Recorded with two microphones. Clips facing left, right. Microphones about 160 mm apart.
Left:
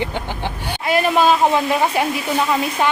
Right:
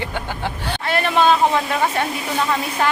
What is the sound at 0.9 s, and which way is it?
Speech, 5° left (ahead or behind).